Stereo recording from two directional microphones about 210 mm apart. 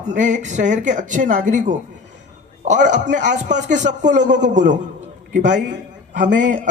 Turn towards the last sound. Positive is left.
turn(degrees=-35)  # may be behind; listen again after turning